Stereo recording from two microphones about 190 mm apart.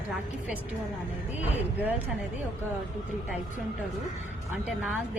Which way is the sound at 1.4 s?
10° right (ahead or behind).